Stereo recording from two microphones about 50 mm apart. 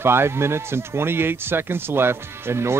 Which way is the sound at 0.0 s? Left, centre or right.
Right.